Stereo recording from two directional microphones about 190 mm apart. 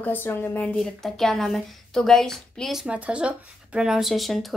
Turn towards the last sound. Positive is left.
turn(degrees=0)  # may be behind; listen again after turning